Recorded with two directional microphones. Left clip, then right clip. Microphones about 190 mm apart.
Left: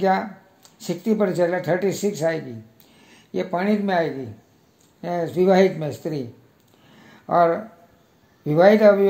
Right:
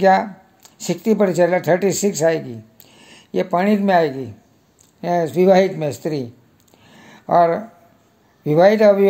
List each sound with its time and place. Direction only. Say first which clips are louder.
0.0 s speech: right 7 dB; 40° right (ahead or behind)
6.9 s a sound: right 5 dB; 35° right (ahead or behind)
8.5 s speech: right 2 dB; 35° right (ahead or behind)